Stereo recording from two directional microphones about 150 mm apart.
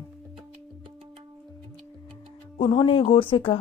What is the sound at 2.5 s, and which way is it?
A woman's voice, 35° left (ahead or behind).